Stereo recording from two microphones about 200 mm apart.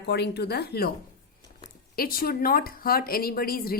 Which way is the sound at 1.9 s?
45° left (ahead or behind).